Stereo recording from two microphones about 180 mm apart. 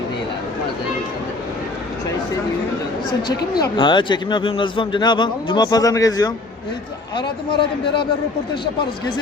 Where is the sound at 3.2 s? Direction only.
60° left (ahead or behind).